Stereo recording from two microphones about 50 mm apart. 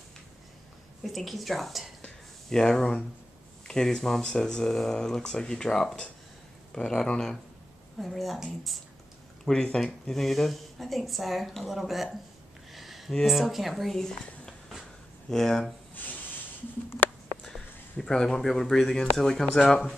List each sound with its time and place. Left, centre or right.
1.0 s a woman's voice: centre
9.5 s speech: centre
10.0 s a woman's voice: centre
12.7 s a sound: centre
13.3 s speech: centre
15.9 s rub: left
17.9 s speech: centre